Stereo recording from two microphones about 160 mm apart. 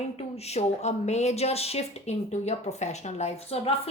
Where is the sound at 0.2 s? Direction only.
40° left (ahead or behind).